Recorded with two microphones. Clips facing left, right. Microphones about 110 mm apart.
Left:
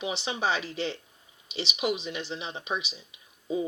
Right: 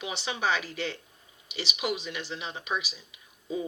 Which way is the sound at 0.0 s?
25° left (ahead or behind).